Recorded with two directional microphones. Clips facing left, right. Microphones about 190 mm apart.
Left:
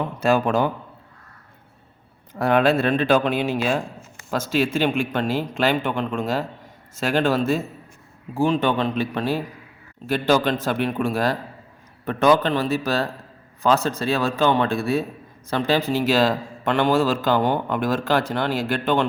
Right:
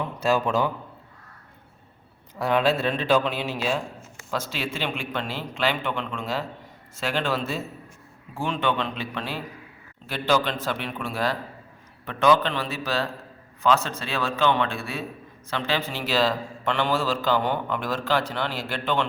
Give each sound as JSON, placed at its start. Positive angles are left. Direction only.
{"t": 0.2, "sound": "a man's voice", "side_deg": 55}
{"t": 2.4, "sound": "a man's voice", "side_deg": 55}